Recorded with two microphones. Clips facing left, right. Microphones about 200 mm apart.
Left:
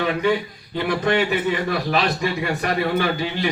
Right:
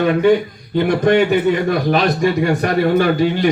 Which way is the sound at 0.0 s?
50° right (ahead or behind).